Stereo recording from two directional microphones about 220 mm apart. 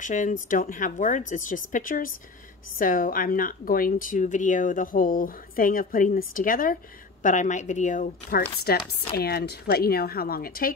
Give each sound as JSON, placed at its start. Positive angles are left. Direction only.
{"t": 0.0, "sound": "speech", "side_deg": 35}